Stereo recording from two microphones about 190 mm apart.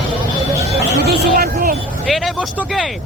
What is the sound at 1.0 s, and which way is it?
Hubbub, 60° right (ahead or behind).